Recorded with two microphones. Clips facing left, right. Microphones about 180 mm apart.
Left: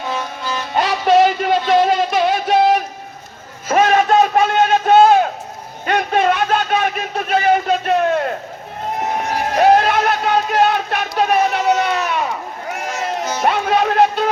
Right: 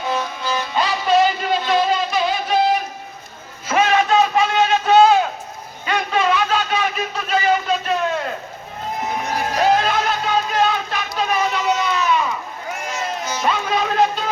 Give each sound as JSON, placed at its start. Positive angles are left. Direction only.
{"t": 0.7, "sound": "music", "side_deg": 60}
{"t": 3.7, "sound": "a sound", "side_deg": 45}
{"t": 9.6, "sound": "music", "side_deg": 60}